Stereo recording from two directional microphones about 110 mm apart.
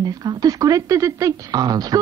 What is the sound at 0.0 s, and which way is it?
Speech, 40° right (ahead or behind).